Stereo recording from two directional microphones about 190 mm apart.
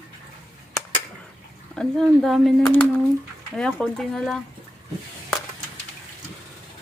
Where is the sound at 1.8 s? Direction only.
Centre (ahead or behind).